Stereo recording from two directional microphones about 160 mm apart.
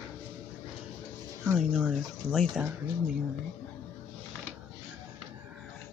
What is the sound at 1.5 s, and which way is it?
Speech, centre (ahead or behind).